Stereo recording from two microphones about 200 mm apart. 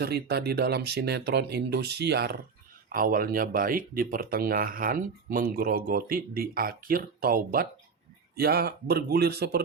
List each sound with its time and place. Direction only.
0.0 s speech: 55° right (ahead or behind)